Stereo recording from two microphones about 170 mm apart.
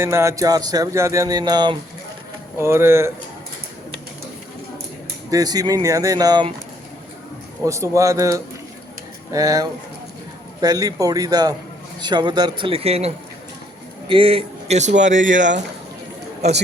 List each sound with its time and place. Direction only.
0.0 s music: 15° right (ahead or behind)
2.6 s speech: 15° right (ahead or behind)
5.3 s music: 20° right (ahead or behind)
7.6 s music: 20° right (ahead or behind); by 13.1 s 35° right (ahead or behind)
14.1 s a man's voice: 30° right (ahead or behind)
14.9 s speech: 90° right
15.4 s speech: 45° right (ahead or behind)